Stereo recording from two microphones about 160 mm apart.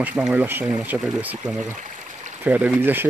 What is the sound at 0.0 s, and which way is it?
Speech, 10° right (ahead or behind).